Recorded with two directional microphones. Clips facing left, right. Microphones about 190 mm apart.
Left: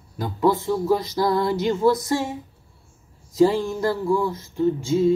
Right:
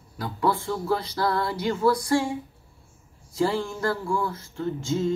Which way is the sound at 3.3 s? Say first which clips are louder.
Left 7 dB; 15° left (ahead or behind).